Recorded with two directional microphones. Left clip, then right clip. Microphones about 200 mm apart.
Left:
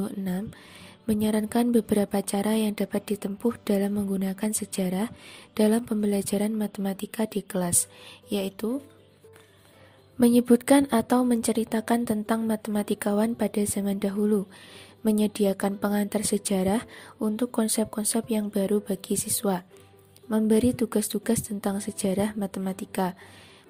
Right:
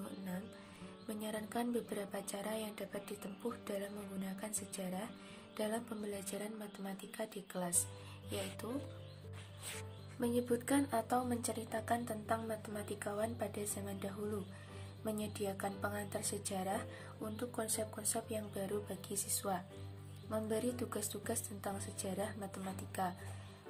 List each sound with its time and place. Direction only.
1.0 s speech: 50° left (ahead or behind)
10.2 s speech: 50° left (ahead or behind)